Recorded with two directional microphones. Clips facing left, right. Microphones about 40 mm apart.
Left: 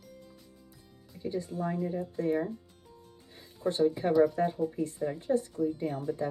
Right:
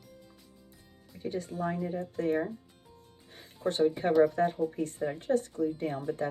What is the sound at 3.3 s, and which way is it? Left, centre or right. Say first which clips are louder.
Speech: even; right.